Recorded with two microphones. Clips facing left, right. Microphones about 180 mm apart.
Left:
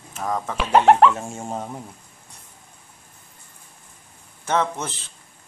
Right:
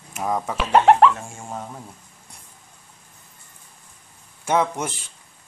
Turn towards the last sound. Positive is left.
turn(degrees=-10)  # may be behind; listen again after turning